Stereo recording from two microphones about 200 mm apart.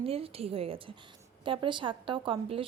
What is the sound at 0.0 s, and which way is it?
A woman's voice, 30° right (ahead or behind).